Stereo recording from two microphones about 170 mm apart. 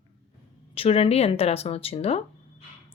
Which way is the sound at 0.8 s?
35° left (ahead or behind).